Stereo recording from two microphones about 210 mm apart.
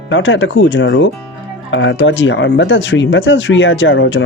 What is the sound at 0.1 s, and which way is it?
Speech, 65° left (ahead or behind).